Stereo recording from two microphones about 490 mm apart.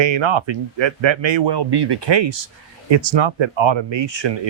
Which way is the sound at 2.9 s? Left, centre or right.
Right.